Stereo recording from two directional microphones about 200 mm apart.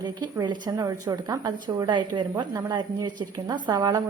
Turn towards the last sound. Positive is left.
turn(degrees=-20)  # may be behind; listen again after turning